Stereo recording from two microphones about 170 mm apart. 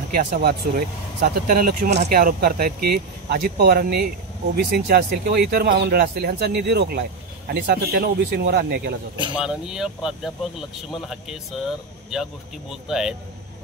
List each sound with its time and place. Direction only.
0.1 s speech: 45° right (ahead or behind)
0.4 s speech: 65° right (ahead or behind)
9.3 s speech: 5° right (ahead or behind)
12.1 s speech: centre (ahead or behind)